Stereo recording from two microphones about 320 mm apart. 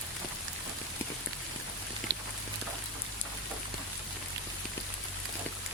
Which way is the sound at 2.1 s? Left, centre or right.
Right.